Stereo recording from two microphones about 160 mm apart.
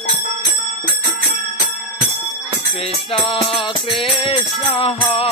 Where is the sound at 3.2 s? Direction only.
35° left (ahead or behind).